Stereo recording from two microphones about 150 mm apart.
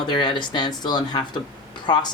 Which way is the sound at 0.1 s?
30° left (ahead or behind).